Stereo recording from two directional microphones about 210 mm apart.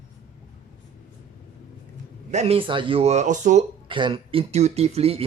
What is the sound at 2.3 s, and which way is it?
Speech, 30° right (ahead or behind).